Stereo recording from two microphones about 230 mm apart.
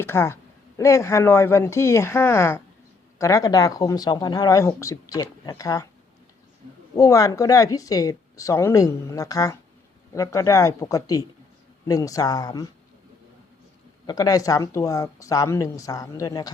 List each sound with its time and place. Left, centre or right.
0.0 s speech: centre
6.9 s speech: centre
14.1 s speech: centre